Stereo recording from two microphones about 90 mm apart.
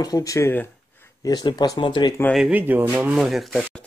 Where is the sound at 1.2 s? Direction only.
50° left (ahead or behind).